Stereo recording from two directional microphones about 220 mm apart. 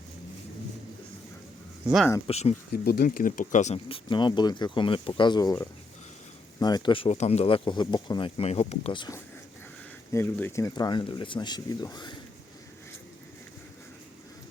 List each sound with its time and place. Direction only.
2.2 s speech: 30° left (ahead or behind)
2.7 s speech: 45° left (ahead or behind); by 12.1 s 20° left (ahead or behind)